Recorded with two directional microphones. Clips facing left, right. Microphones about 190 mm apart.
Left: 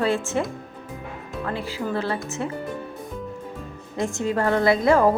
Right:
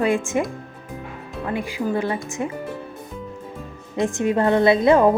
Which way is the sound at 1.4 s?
15° right (ahead or behind).